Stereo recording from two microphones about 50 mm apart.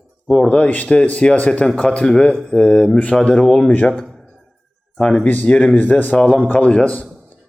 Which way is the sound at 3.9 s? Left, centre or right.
Centre.